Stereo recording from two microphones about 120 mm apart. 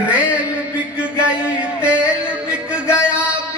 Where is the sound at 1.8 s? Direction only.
10° right (ahead or behind).